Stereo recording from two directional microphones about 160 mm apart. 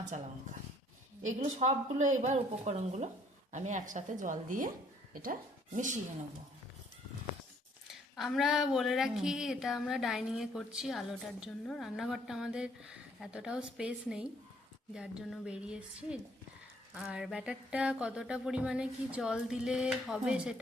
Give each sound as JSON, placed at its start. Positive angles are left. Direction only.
{"t": 1.2, "sound": "speech", "side_deg": -50}
{"t": 7.9, "sound": "speech", "side_deg": 0}